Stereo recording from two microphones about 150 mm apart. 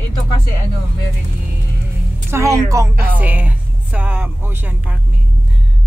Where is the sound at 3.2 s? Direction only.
10° right (ahead or behind).